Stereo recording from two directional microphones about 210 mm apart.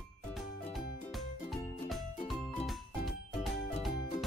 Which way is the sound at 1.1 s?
Centre (ahead or behind).